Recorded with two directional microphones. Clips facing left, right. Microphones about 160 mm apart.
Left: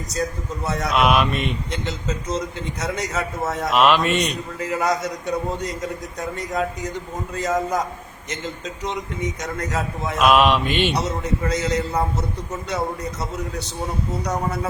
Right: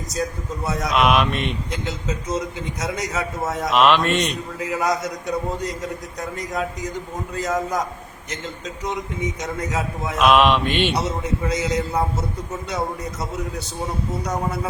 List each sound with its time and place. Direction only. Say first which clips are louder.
0.7 s speech: even; centre (ahead or behind)
6.1 s speech: left 2 dB; centre (ahead or behind)
9.4 s speech: even; 5° right (ahead or behind)
10.7 s speech: even; 45° left (ahead or behind)
11.4 s speech: even; centre (ahead or behind)